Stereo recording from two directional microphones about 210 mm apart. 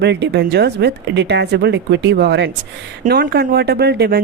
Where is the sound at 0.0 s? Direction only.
55° right (ahead or behind).